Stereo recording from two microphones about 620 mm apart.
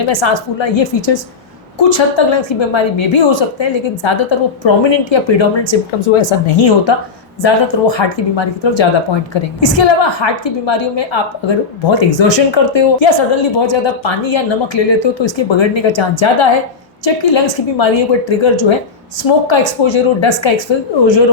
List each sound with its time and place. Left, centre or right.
0.1 s a woman's voice: left